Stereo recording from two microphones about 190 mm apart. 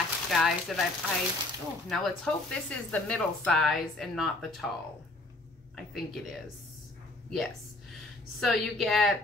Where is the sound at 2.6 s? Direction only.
5° left (ahead or behind).